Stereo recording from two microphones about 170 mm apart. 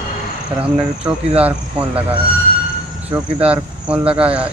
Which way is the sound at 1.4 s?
10° right (ahead or behind).